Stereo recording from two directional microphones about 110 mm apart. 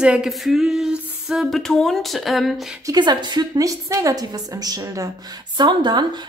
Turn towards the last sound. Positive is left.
turn(degrees=-40)  # may be behind; listen again after turning